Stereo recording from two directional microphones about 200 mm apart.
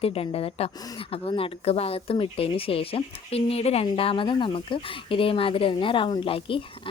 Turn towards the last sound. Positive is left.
turn(degrees=25)  # may be behind; listen again after turning